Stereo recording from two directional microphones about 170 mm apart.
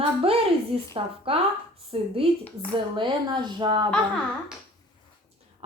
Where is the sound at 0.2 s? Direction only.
35° right (ahead or behind).